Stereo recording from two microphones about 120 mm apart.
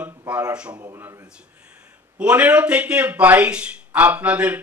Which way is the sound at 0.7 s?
30° right (ahead or behind).